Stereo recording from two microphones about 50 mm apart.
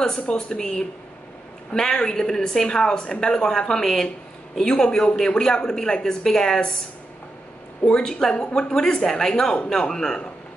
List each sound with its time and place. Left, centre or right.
0.0 s speech: centre
8.0 s speech: centre